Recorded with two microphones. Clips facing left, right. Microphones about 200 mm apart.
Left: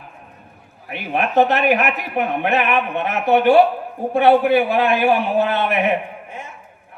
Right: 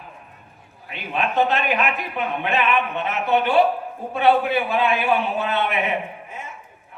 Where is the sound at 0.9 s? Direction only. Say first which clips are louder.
Left 3 dB; 60° left (ahead or behind).